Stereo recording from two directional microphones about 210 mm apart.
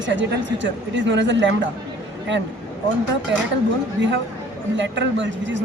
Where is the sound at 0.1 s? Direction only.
60° right (ahead or behind).